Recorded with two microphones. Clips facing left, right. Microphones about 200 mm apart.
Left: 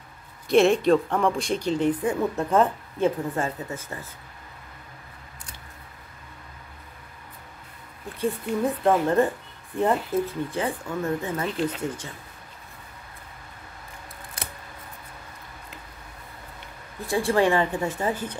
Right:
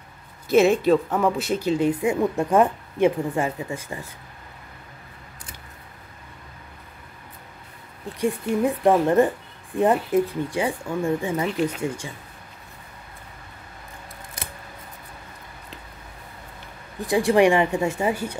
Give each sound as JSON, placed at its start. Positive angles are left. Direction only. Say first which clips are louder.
{"t": 0.5, "sound": "speech", "louder": "right 1 dB", "side_deg": 0}
{"t": 8.2, "sound": "speech", "louder": "right 3 dB", "side_deg": -15}
{"t": 17.0, "sound": "speech", "louder": "right 4 dB", "side_deg": -15}